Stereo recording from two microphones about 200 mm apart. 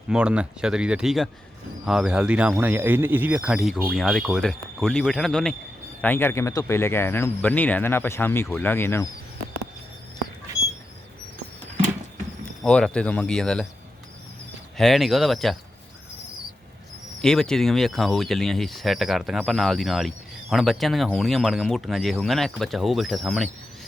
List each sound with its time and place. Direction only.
0.1 s speech: 5° right (ahead or behind); by 9.0 s 10° left (ahead or behind)
12.6 s speech: 5° left (ahead or behind)
14.8 s speech: centre (ahead or behind)
17.2 s speech: 5° left (ahead or behind)